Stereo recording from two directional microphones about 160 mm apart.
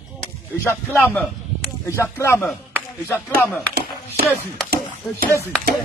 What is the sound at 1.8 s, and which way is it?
Speech, 15° left (ahead or behind).